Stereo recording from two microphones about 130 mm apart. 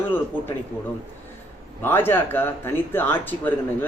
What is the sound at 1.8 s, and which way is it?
Speech, 15° left (ahead or behind).